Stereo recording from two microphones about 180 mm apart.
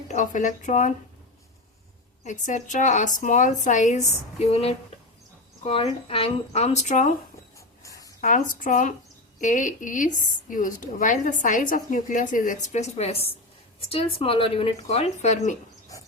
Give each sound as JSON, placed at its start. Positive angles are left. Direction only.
{"t": 0.1, "sound": "a woman's voice", "side_deg": 45}
{"t": 2.2, "sound": "a woman's voice", "side_deg": 45}
{"t": 7.8, "sound": "a sound", "side_deg": 20}
{"t": 8.2, "sound": "a woman's voice", "side_deg": 45}